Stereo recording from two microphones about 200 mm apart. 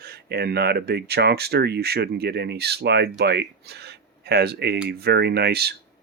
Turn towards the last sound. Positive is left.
turn(degrees=-50)  # may be behind; listen again after turning